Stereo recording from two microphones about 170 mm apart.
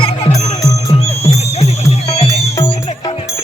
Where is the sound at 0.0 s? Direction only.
40° left (ahead or behind).